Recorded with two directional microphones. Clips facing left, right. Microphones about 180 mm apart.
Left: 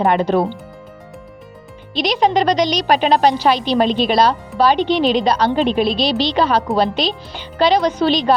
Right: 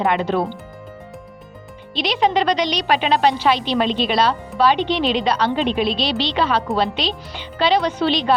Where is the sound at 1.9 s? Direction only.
40° left (ahead or behind).